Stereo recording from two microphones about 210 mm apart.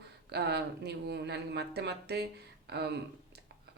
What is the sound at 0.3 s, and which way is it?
A woman's voice, 50° right (ahead or behind).